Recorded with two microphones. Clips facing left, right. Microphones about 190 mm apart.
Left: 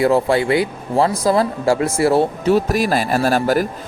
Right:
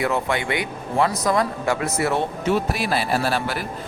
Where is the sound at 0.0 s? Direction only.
35° left (ahead or behind).